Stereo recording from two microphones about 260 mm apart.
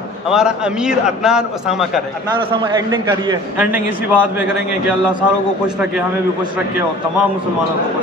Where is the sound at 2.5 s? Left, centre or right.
Centre.